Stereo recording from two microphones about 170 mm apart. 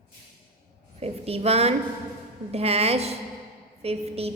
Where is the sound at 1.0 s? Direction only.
35° right (ahead or behind).